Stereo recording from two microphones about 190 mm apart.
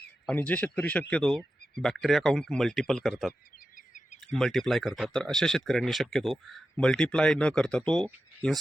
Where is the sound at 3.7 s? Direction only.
40° left (ahead or behind).